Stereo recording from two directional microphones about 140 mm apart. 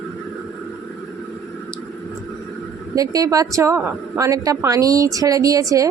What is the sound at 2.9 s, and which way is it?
A woman's voice, 25° right (ahead or behind).